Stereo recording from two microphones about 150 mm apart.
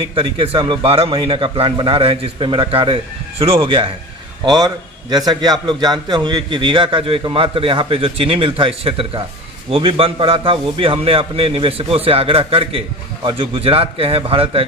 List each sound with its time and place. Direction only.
0.1 s a man's voice: 35° right (ahead or behind)